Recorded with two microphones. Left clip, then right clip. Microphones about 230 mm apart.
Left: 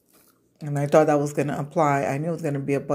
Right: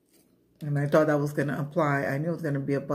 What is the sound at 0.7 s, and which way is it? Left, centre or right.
Speech, centre.